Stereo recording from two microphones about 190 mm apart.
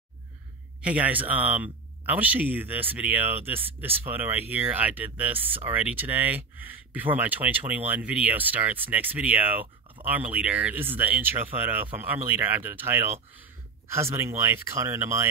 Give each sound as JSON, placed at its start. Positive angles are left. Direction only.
{"t": 0.8, "sound": "speech", "side_deg": -10}